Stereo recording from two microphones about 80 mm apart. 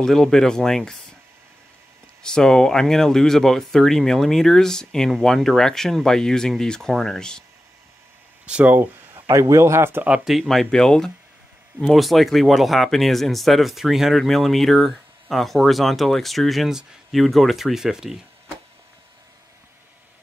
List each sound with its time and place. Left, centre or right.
0.0 s speech: centre
2.2 s speech: centre
8.5 s speech: centre
9.1 s a man's voice: right
10.0 s speech: centre
10.3 s speech: centre